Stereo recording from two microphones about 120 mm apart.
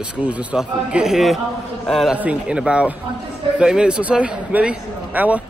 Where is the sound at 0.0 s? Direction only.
10° right (ahead or behind).